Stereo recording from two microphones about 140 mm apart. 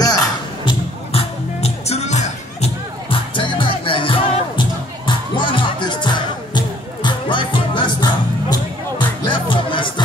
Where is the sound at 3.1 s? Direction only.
35° left (ahead or behind).